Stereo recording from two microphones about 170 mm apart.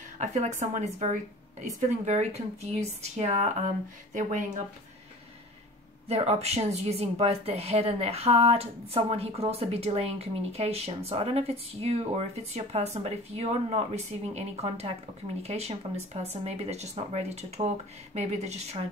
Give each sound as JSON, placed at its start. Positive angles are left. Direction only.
{"t": 0.2, "sound": "a woman's voice", "side_deg": -45}
{"t": 6.0, "sound": "a woman's voice", "side_deg": -40}